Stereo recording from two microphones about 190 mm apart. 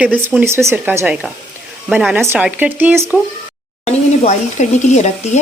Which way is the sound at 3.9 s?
35° left (ahead or behind).